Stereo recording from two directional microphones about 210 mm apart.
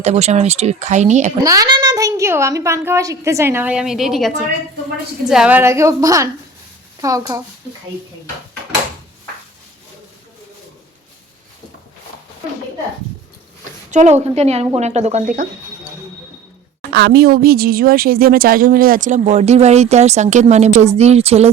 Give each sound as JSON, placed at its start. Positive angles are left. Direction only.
{"t": 0.0, "sound": "speech", "side_deg": -30}
{"t": 1.5, "sound": "a woman's voice", "side_deg": -20}
{"t": 13.9, "sound": "speech", "side_deg": -30}
{"t": 16.9, "sound": "speech", "side_deg": -50}